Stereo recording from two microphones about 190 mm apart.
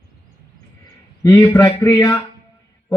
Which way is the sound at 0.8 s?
15° left (ahead or behind).